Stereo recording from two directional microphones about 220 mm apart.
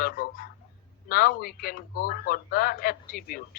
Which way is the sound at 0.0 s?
40° left (ahead or behind).